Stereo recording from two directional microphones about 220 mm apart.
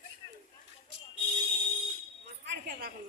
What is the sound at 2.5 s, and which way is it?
Speech, 45° right (ahead or behind).